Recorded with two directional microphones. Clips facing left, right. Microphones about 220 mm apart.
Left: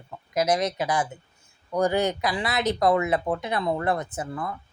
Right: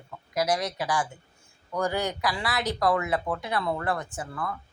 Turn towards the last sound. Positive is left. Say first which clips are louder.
# left 3 dB
turn(degrees=20)  # may be behind; listen again after turning